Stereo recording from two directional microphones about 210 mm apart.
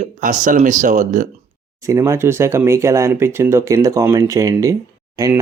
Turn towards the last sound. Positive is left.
turn(degrees=-15)  # may be behind; listen again after turning